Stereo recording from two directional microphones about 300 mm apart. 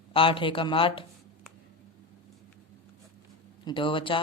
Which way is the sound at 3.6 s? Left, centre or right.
Centre.